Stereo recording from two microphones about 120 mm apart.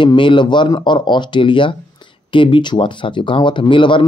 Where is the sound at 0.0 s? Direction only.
40° left (ahead or behind).